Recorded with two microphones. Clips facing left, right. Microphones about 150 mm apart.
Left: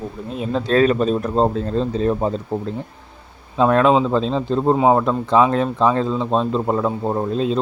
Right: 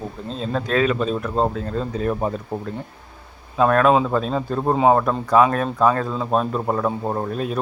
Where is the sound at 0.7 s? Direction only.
40° left (ahead or behind).